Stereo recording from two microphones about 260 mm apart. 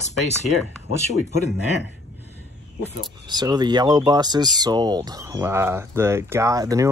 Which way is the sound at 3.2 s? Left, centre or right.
Centre.